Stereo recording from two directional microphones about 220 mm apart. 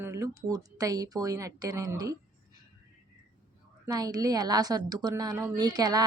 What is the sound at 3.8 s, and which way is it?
A woman's voice, 15° right (ahead or behind).